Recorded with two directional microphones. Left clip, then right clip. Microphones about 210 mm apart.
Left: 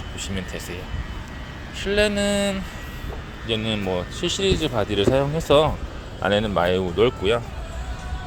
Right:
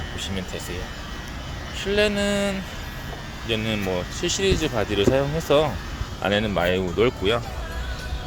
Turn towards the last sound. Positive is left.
turn(degrees=15)  # may be behind; listen again after turning